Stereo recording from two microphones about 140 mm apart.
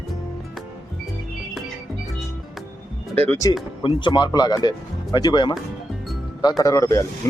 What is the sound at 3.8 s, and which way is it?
Speech, 35° left (ahead or behind).